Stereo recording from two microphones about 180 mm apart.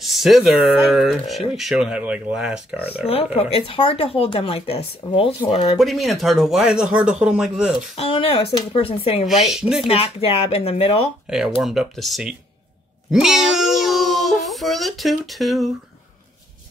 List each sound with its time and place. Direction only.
0.0 s speech: centre (ahead or behind)
3.1 s speech: 35° left (ahead or behind)
5.8 s speech: centre (ahead or behind)
7.9 s speech: 30° left (ahead or behind)
9.5 s speech: 5° right (ahead or behind)
9.8 s speech: 35° left (ahead or behind)
11.2 s speech: centre (ahead or behind)